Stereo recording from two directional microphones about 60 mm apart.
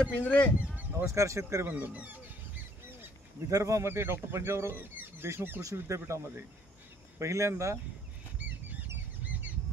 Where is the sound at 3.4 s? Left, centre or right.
Right.